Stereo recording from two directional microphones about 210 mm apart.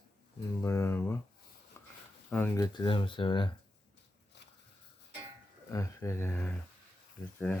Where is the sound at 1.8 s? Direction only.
10° left (ahead or behind).